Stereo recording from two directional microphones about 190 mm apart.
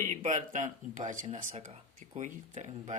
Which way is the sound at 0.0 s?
40° right (ahead or behind).